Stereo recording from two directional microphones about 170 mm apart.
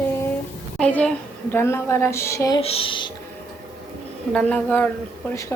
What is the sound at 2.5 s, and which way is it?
Speech, 35° left (ahead or behind).